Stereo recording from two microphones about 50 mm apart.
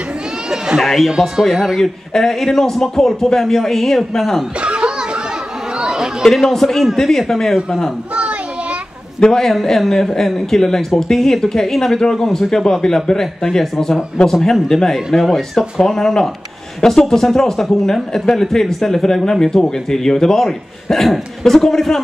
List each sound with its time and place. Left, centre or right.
0.5 s a sound: centre
0.8 s speech: centre
4.6 s a sound: right
5.8 s chatter: centre
6.2 s speech: centre
8.1 s children playing: right
9.2 s speech: centre
9.5 s speech: centre
15.0 s speech: centre
15.8 s speech: centre